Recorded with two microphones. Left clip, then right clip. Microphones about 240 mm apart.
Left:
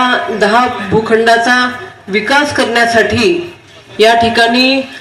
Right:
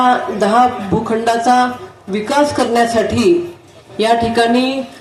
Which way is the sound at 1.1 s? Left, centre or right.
Right.